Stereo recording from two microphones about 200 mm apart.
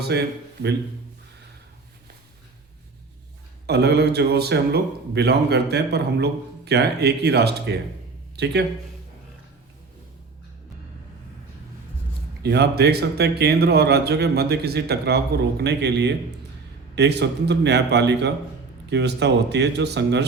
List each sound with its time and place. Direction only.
0.1 s a man's voice: 55° right (ahead or behind)
3.7 s a man's voice: 55° right (ahead or behind)
12.4 s a man's voice: 55° right (ahead or behind)